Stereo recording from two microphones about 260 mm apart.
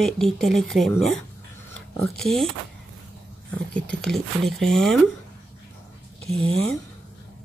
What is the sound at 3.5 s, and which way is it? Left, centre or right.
Speech, centre.